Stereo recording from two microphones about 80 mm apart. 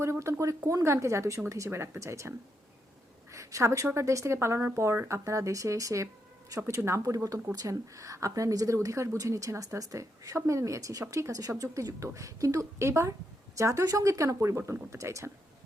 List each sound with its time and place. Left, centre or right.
0.0 s a woman's voice: right
3.3 s a woman's voice: right